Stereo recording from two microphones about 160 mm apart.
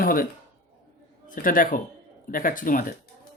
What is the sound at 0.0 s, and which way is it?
Speech, 65° left (ahead or behind).